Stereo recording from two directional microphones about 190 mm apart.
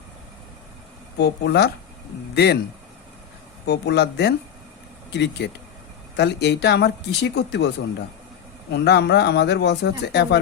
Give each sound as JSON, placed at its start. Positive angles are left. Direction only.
{"t": 1.2, "sound": "speech", "side_deg": 60}
{"t": 3.7, "sound": "speech", "side_deg": 65}
{"t": 8.7, "sound": "speech", "side_deg": 60}